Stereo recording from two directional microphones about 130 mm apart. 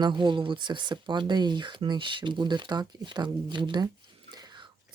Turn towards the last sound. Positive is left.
turn(degrees=-35)  # may be behind; listen again after turning